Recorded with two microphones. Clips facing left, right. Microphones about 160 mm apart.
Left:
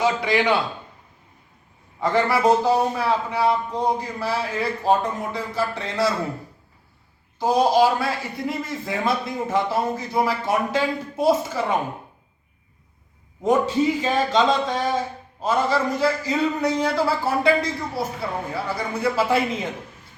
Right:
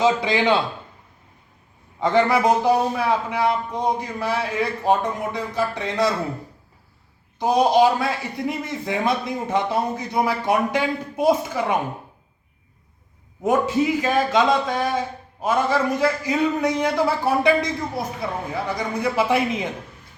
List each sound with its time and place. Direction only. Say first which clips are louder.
0.0 s a man's voice: right 2 dB; 20° right (ahead or behind)
2.0 s speech: right 2 dB; 20° right (ahead or behind)
7.3 s a man's voice: right 1 dB; 20° right (ahead or behind)
13.4 s speech: even; 5° right (ahead or behind)